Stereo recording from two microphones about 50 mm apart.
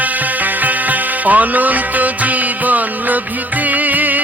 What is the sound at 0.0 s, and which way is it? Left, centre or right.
Music, right.